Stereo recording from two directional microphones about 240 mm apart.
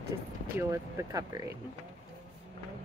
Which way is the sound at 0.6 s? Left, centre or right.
Centre.